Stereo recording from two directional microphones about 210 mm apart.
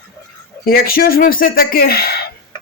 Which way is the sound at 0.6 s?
45° left (ahead or behind).